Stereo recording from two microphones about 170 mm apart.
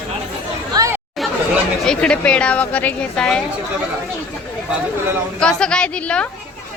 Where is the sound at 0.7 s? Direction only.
20° right (ahead or behind).